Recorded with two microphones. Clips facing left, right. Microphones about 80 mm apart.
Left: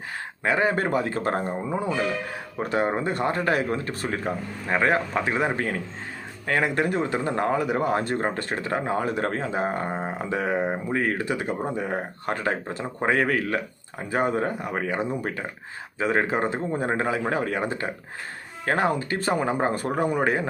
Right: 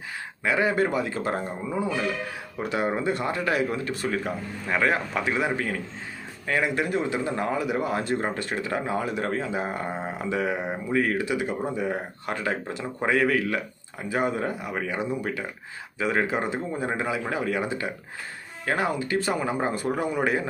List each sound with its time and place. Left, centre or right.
0.4 s speech: left